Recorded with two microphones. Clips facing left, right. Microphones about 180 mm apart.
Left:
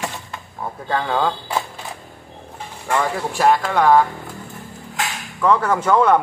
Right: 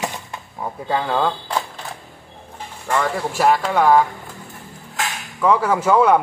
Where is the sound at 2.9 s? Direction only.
Centre (ahead or behind).